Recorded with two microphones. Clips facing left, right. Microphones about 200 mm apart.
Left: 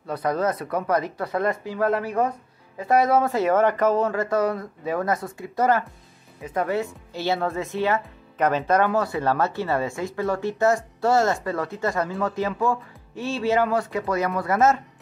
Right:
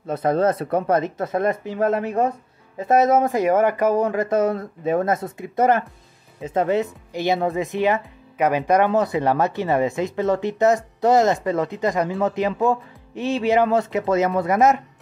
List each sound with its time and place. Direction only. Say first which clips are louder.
0.0 s speech: right 5 dB; 25° right (ahead or behind)